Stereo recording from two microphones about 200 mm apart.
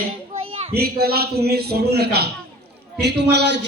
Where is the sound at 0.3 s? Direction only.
30° right (ahead or behind).